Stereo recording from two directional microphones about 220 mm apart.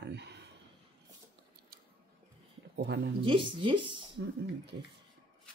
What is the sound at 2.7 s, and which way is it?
Speech, 50° right (ahead or behind).